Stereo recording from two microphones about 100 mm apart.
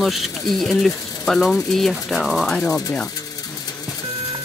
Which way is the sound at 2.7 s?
35° left (ahead or behind).